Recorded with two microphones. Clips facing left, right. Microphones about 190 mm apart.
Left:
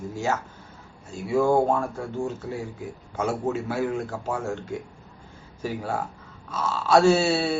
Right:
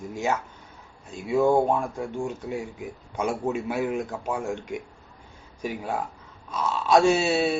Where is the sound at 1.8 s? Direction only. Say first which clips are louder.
Left 1 dB; 15° right (ahead or behind).